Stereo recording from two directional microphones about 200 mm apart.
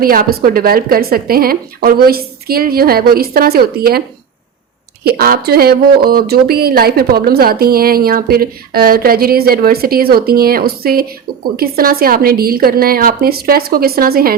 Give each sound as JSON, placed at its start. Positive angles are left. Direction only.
{"t": 0.0, "sound": "speech", "side_deg": -45}
{"t": 5.0, "sound": "speech", "side_deg": -50}